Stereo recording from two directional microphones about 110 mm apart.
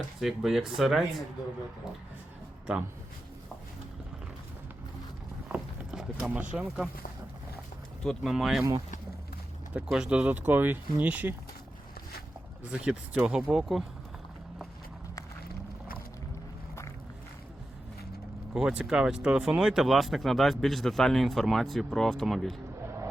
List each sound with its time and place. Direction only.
0.2 s speech: centre (ahead or behind)
5.5 s rowboat: 5° right (ahead or behind)
8.0 s speech: centre (ahead or behind)
9.7 s speech: 10° right (ahead or behind)
12.7 s speech: 10° right (ahead or behind)
18.5 s speech: 10° right (ahead or behind)